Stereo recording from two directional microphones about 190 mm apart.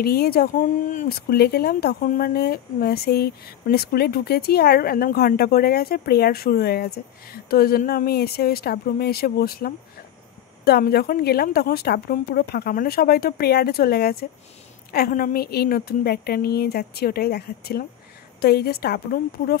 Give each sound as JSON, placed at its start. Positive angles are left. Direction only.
{"t": 0.0, "sound": "a woman's voice", "side_deg": 55}